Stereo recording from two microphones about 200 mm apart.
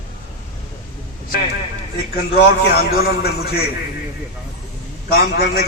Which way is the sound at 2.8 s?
50° left (ahead or behind).